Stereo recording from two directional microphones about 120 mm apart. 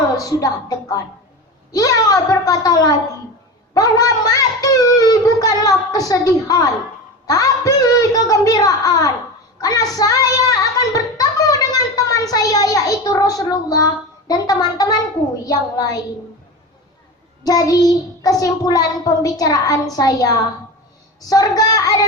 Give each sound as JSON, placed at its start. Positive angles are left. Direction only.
{"t": 0.2, "sound": "a child's voice", "side_deg": 30}
{"t": 17.4, "sound": "a child's voice", "side_deg": 30}